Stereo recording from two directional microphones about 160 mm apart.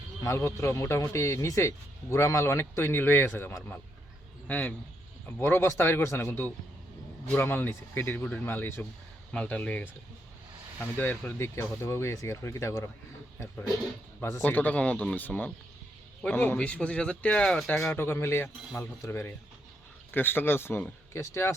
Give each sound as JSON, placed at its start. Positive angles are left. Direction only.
{"t": 0.2, "sound": "a man's voice", "side_deg": 15}
{"t": 14.2, "sound": "a man's voice", "side_deg": 15}